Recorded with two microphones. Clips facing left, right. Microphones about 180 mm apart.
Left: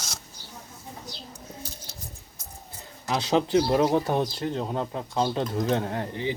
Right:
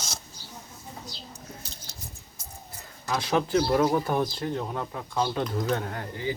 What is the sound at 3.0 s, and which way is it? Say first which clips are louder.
Speech: left 2 dB; 20° left (ahead or behind).